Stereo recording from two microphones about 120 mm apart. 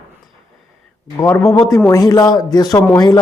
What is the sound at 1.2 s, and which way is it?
Speech, 25° left (ahead or behind).